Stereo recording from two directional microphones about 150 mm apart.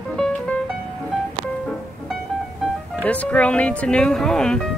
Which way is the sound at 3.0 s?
10° left (ahead or behind).